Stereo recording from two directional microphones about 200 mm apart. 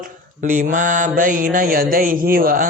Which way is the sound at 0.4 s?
40° right (ahead or behind).